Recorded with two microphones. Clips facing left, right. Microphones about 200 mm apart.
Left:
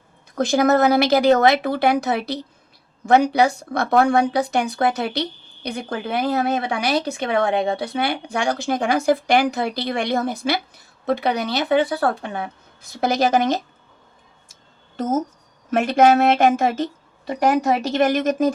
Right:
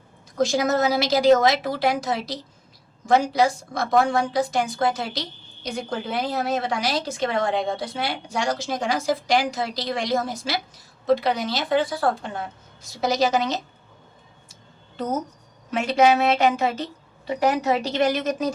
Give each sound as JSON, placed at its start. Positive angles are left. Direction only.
{"t": 0.3, "sound": "a woman's voice", "side_deg": 60}
{"t": 14.9, "sound": "a woman's voice", "side_deg": 45}